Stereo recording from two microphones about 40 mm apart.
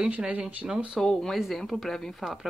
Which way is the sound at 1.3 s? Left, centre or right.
Centre.